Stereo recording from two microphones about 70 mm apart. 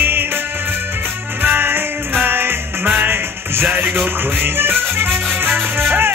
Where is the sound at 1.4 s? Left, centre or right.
Right.